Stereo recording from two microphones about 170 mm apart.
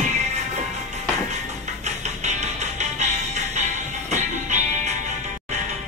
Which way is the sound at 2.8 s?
45° right (ahead or behind).